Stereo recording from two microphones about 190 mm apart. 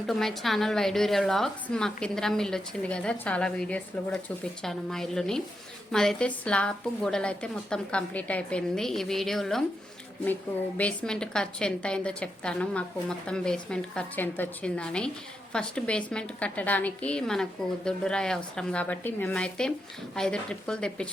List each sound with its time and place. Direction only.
0.1 s a woman's voice: centre (ahead or behind)
10.8 s a woman's voice: 5° left (ahead or behind)